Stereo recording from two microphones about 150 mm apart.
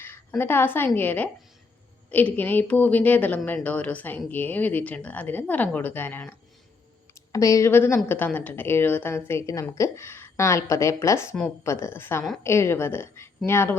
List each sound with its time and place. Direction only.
0.0 s a woman's voice: 15° left (ahead or behind)